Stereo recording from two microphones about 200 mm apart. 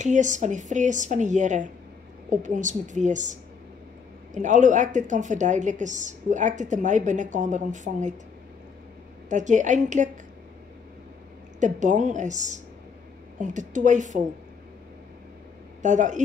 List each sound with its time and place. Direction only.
0.0 s a woman's voice: 40° right (ahead or behind)
9.3 s a woman's voice: 40° right (ahead or behind)
11.6 s a woman's voice: 40° right (ahead or behind)
15.8 s a woman's voice: 40° right (ahead or behind)